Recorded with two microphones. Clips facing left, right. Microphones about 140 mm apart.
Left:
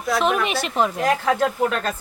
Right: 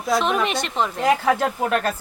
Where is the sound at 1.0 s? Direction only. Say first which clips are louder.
Right 4 dB; 10° right (ahead or behind).